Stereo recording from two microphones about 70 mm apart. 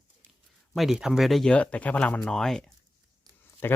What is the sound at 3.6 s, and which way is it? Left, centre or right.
Speech, left.